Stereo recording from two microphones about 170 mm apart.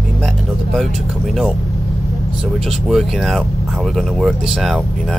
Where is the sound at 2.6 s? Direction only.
Centre (ahead or behind).